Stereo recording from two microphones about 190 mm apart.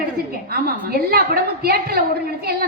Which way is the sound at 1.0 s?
55° right (ahead or behind).